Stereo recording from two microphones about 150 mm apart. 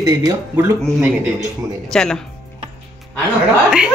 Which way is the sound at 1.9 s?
5° left (ahead or behind).